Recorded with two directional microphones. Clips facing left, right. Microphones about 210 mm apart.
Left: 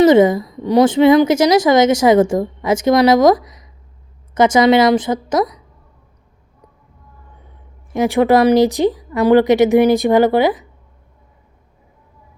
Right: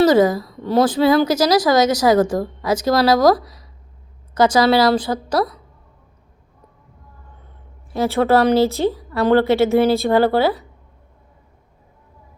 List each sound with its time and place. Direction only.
0.0 s a woman's voice: 25° left (ahead or behind)
4.4 s a woman's voice: 25° left (ahead or behind)
7.9 s speech: 15° left (ahead or behind)